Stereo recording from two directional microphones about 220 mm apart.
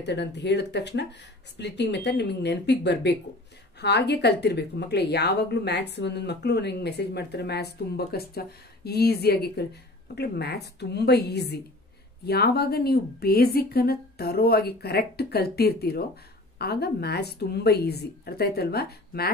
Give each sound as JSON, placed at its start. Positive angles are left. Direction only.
{"t": 0.0, "sound": "speech", "side_deg": 50}